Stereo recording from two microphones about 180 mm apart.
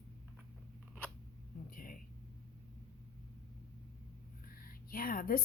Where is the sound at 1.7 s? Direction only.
50° left (ahead or behind).